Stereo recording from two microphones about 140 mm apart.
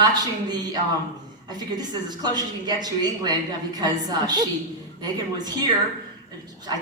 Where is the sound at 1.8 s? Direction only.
30° right (ahead or behind).